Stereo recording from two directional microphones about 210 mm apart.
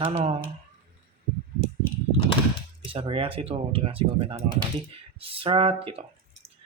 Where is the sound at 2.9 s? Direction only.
25° right (ahead or behind).